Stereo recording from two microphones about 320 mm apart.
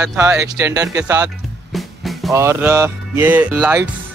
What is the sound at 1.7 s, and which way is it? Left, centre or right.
Music, centre.